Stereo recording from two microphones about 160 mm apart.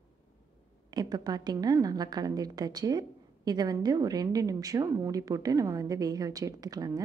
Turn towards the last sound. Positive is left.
turn(degrees=-25)  # may be behind; listen again after turning